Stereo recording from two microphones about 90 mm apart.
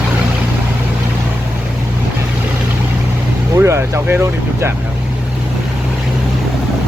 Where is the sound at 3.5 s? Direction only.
30° right (ahead or behind).